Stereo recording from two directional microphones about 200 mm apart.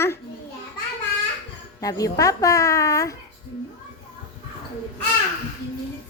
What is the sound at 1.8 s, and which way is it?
A child's voice, 15° left (ahead or behind).